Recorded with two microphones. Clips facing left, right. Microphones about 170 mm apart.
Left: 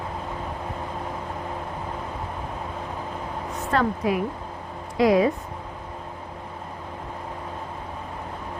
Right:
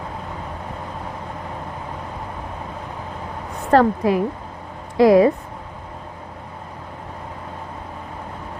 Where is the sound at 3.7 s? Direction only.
60° right (ahead or behind).